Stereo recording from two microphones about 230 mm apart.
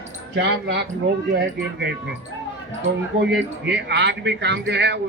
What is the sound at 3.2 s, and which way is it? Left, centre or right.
Speech, right.